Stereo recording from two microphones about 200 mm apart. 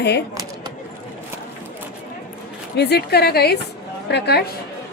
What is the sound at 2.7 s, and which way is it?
A woman's voice, 55° left (ahead or behind).